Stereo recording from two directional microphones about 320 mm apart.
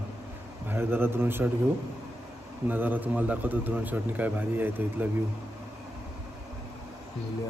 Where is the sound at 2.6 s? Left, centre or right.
Centre.